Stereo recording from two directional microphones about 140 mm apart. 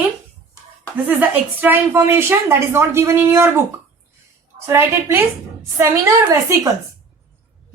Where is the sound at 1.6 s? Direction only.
15° right (ahead or behind).